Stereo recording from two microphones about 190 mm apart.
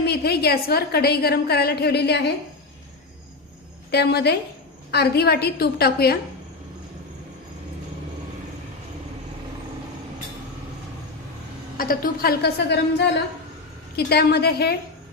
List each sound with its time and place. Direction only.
0.0 s a woman's voice: 55° left (ahead or behind)
3.9 s a woman's voice: 60° left (ahead or behind)
11.8 s a woman's voice: 50° left (ahead or behind)